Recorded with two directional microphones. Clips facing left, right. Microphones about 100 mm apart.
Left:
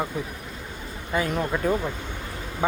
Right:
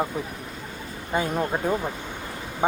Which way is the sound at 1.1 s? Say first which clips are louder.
Even; 25° right (ahead or behind).